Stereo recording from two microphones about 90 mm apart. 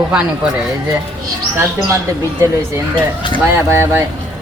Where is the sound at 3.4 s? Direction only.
25° right (ahead or behind).